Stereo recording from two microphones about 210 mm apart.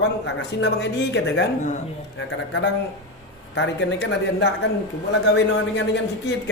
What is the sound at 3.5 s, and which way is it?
A man's voice, 55° left (ahead or behind).